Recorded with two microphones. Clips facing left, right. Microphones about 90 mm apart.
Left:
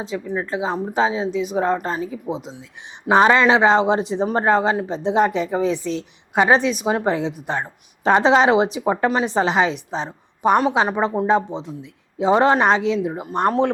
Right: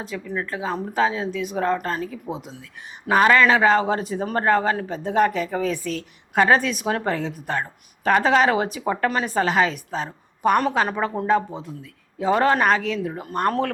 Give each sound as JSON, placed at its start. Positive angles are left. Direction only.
{"t": 0.1, "sound": "speech", "side_deg": 25}